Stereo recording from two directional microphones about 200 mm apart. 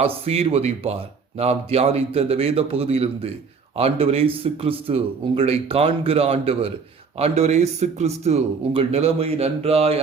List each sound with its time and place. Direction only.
0.0 s speech: 30° right (ahead or behind)